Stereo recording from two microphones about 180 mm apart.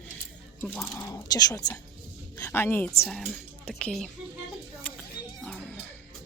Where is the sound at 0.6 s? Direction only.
10° left (ahead or behind).